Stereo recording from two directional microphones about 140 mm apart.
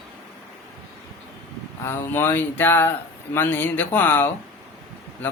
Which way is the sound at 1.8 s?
15° left (ahead or behind).